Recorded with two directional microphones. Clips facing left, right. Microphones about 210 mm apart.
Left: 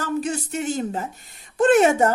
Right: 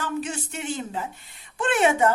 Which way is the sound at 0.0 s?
40° left (ahead or behind).